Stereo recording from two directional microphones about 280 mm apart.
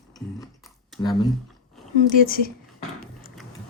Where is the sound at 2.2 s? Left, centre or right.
Left.